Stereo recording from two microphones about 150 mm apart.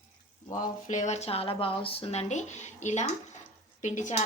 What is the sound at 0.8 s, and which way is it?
Speech, 55° left (ahead or behind).